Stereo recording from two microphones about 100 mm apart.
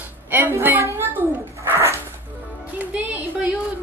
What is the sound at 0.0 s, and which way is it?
Dog, 20° right (ahead or behind).